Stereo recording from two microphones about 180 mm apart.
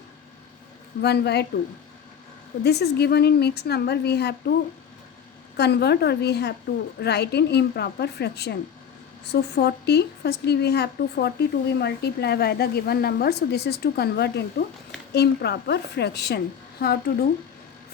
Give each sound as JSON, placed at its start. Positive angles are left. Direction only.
{"t": 1.0, "sound": "speech", "side_deg": 65}
{"t": 2.6, "sound": "speech", "side_deg": 65}
{"t": 5.5, "sound": "a woman's voice", "side_deg": 65}